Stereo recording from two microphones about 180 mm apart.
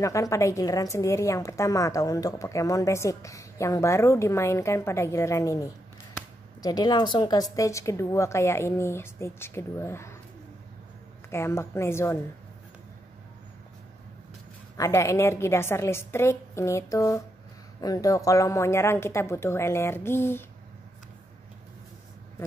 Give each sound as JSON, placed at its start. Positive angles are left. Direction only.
{"t": 0.0, "sound": "a woman's voice", "side_deg": 15}
{"t": 11.2, "sound": "a woman's voice", "side_deg": 15}
{"t": 14.8, "sound": "a woman's voice", "side_deg": 15}